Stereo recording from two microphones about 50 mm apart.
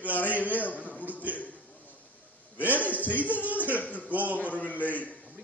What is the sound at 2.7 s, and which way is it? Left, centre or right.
A man's voice, left.